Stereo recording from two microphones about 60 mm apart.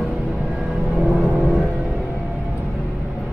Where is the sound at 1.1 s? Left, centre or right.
Centre.